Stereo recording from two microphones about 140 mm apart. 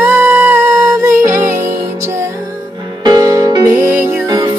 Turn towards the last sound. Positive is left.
turn(degrees=-15)  # may be behind; listen again after turning